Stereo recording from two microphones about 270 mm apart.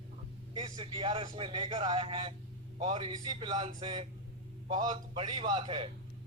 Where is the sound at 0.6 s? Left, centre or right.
Centre.